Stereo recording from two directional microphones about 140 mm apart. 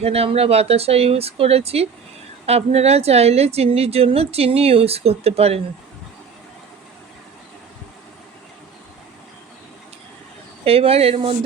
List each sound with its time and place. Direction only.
0.0 s a woman's voice: 45° right (ahead or behind)
10.7 s a woman's voice: 45° right (ahead or behind)